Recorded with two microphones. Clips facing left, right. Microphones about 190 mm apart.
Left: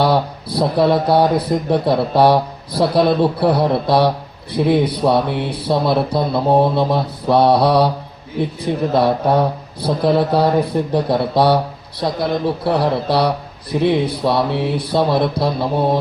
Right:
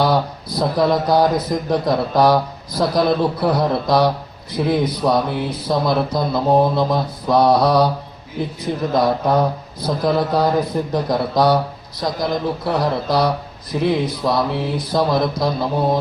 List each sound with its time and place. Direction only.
0.0 s speech: 30° left (ahead or behind)
8.6 s mantra: 30° left (ahead or behind)
12.6 s speech: 30° left (ahead or behind)